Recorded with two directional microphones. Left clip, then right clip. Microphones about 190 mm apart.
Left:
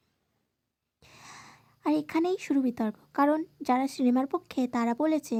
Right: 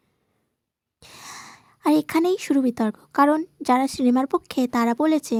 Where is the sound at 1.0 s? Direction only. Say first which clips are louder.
Right 9 dB; 30° right (ahead or behind).